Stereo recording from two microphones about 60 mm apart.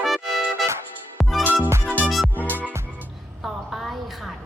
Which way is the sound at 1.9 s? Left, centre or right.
Right.